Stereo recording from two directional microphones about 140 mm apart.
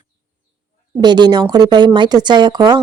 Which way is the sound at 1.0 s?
30° right (ahead or behind).